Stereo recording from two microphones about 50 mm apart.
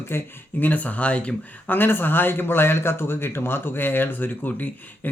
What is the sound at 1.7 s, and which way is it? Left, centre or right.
Speech, left.